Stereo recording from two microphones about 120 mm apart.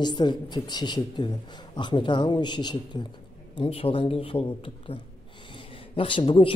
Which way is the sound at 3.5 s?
50° left (ahead or behind).